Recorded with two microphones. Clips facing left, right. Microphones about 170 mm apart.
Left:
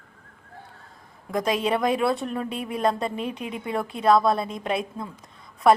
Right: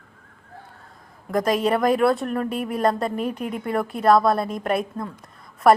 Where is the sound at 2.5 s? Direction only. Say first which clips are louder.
Right 4 dB; 50° right (ahead or behind).